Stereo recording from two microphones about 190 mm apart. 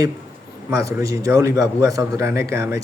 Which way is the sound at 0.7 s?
15° right (ahead or behind).